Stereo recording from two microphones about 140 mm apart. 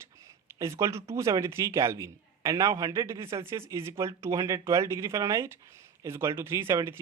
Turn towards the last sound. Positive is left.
turn(degrees=-20)  # may be behind; listen again after turning